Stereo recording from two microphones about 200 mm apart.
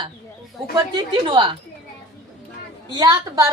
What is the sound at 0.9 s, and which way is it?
Speech, 25° right (ahead or behind).